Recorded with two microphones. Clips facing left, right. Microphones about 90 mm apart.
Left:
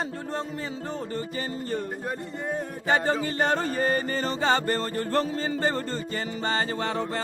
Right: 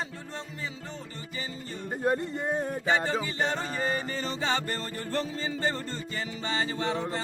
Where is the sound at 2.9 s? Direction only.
45° left (ahead or behind).